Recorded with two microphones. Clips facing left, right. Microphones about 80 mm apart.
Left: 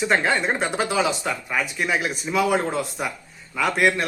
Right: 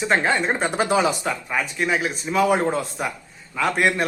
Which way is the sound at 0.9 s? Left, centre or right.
Right.